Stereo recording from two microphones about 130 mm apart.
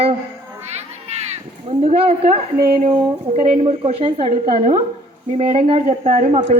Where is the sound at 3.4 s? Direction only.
50° right (ahead or behind).